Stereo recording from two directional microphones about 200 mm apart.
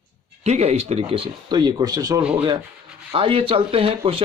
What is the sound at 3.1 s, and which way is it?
Speech, 25° right (ahead or behind).